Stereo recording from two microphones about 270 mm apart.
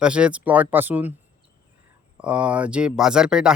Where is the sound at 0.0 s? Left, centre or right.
Centre.